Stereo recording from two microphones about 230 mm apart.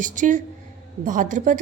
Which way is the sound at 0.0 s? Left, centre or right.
Right.